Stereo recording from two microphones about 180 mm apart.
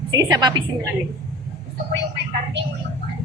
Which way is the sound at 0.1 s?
20° right (ahead or behind).